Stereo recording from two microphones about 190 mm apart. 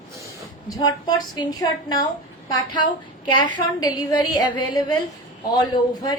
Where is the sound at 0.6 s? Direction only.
20° left (ahead or behind).